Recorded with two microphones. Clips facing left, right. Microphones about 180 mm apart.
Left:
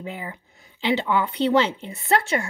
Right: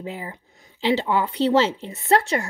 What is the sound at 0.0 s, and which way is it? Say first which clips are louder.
A woman's voice: right 1 dB; 35° right (ahead or behind).